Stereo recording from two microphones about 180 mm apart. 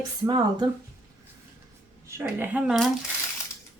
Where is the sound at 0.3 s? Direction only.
30° right (ahead or behind).